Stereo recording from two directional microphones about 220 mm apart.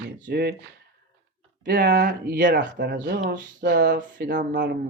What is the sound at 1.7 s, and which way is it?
Speech, 50° right (ahead or behind).